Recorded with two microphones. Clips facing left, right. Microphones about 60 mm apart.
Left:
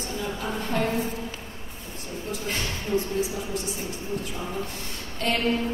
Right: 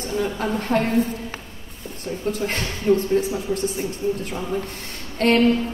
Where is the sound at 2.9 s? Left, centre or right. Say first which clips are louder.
Right 8 dB; right.